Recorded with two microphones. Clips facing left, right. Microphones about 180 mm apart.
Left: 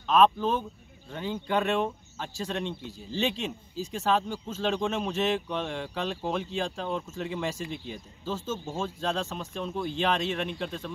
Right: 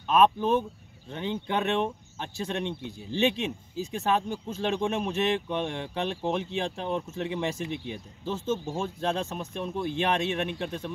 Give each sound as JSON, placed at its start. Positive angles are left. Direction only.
{"t": 0.1, "sound": "speech", "side_deg": -15}